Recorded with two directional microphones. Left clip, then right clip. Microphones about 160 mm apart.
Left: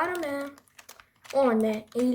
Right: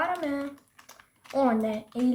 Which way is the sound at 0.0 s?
40° left (ahead or behind).